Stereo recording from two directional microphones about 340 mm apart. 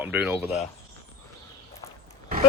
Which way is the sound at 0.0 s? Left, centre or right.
Centre.